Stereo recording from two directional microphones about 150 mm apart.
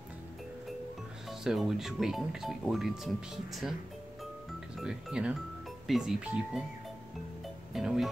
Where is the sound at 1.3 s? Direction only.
Centre (ahead or behind).